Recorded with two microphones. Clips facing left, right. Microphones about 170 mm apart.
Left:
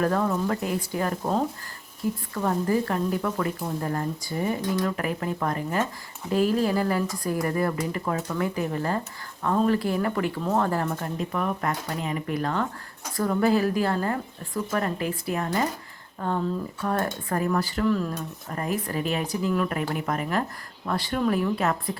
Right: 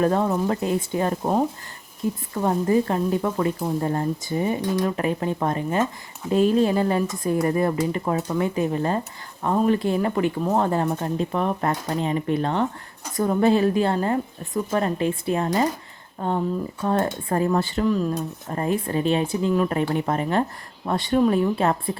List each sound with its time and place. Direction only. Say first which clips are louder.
0.0 s a woman's voice: right 3 dB; 25° right (ahead or behind)
18.1 s a woman's voice: right 5 dB; 30° right (ahead or behind)